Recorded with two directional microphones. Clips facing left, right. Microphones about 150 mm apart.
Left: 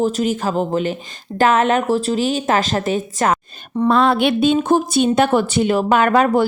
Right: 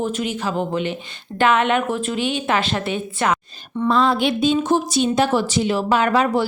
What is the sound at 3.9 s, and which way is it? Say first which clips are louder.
Speech: left 3 dB; 60° left (ahead or behind).